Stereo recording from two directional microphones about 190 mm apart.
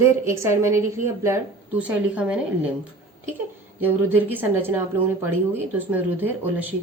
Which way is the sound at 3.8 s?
10° right (ahead or behind).